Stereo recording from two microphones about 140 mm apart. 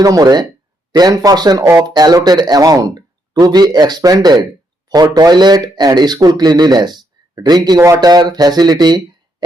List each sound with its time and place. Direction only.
0.0 s speech: 25° right (ahead or behind)